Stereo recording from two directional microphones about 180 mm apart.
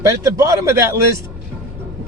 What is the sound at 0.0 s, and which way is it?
Speech, 15° right (ahead or behind).